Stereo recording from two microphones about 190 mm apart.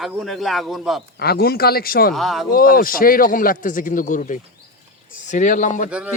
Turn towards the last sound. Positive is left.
turn(degrees=-5)  # may be behind; listen again after turning